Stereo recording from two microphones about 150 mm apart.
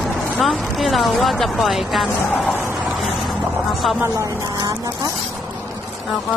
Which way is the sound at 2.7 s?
Centre (ahead or behind).